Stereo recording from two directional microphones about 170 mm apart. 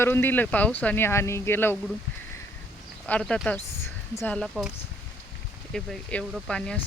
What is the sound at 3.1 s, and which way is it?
Speech, 5° left (ahead or behind).